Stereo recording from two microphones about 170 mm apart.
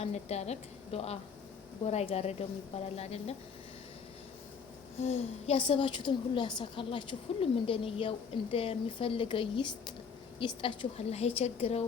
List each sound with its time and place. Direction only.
0.0 s a woman's voice: 40° left (ahead or behind)
4.9 s a woman's voice: 40° left (ahead or behind)